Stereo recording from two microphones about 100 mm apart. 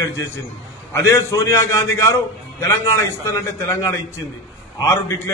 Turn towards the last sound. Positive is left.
turn(degrees=30)  # may be behind; listen again after turning